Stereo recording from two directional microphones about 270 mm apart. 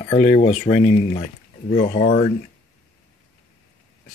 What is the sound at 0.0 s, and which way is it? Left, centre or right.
Speech, centre.